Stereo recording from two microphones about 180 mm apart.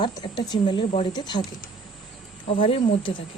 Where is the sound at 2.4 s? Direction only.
30° left (ahead or behind).